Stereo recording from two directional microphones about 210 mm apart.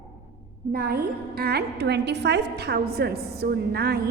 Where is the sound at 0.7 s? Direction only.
45° right (ahead or behind).